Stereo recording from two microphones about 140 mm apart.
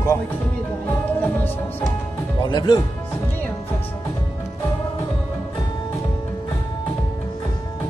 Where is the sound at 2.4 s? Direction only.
30° left (ahead or behind).